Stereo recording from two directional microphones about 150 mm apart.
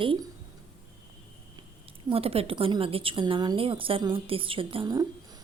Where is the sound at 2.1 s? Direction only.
40° right (ahead or behind).